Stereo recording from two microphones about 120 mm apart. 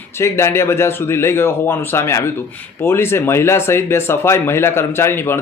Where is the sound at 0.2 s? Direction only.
20° left (ahead or behind).